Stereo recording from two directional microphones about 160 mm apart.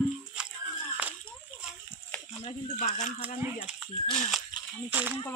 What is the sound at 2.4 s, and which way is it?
Speech, 40° left (ahead or behind).